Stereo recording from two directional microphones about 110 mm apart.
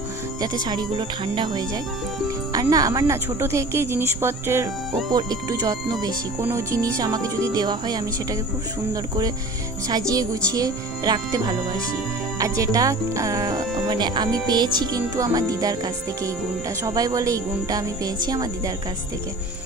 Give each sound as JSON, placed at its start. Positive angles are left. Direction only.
{"t": 0.4, "sound": "speech", "side_deg": -40}
{"t": 2.5, "sound": "speech", "side_deg": -35}
{"t": 5.1, "sound": "speech", "side_deg": -35}